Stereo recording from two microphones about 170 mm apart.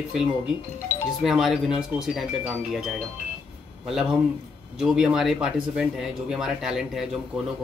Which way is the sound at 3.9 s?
5° right (ahead or behind).